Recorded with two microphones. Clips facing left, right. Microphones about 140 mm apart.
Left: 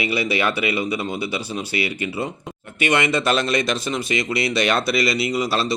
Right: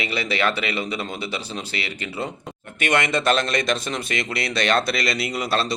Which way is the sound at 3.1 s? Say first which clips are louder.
Left 1 dB; 5° left (ahead or behind).